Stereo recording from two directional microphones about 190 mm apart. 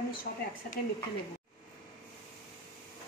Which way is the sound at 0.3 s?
55° left (ahead or behind).